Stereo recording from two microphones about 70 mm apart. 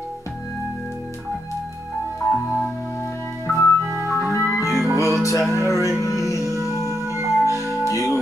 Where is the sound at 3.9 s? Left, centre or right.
Right.